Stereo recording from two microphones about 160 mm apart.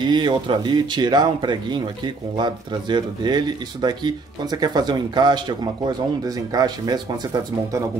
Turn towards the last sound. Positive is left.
turn(degrees=-25)  # may be behind; listen again after turning